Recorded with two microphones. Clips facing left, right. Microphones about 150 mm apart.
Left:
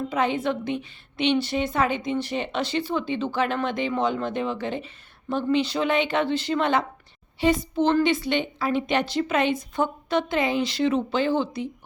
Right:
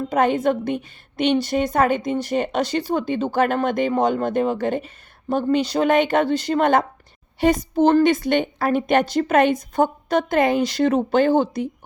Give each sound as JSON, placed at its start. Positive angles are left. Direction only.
{"t": 0.1, "sound": "a woman's voice", "side_deg": -45}